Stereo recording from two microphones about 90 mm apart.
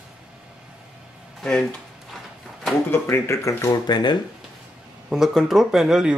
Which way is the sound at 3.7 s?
55° left (ahead or behind).